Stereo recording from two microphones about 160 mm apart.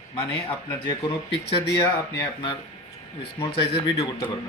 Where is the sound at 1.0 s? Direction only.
35° left (ahead or behind).